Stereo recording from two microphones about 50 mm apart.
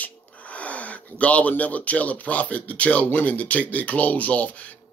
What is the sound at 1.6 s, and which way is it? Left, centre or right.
Speech, left.